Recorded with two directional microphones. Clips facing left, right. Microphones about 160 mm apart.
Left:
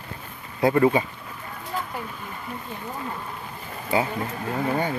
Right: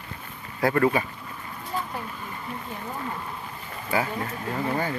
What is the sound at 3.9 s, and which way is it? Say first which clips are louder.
Speech: left 2 dB; 20° left (ahead or behind).